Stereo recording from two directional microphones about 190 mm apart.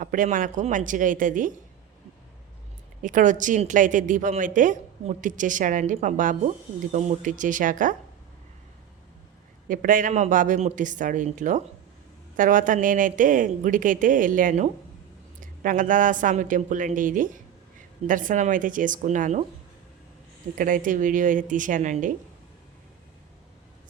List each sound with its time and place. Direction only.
0.0 s a woman's voice: 45° right (ahead or behind)
3.0 s a woman's voice: 45° right (ahead or behind)
9.6 s a woman's voice: 45° right (ahead or behind)
20.6 s a woman's voice: 45° right (ahead or behind)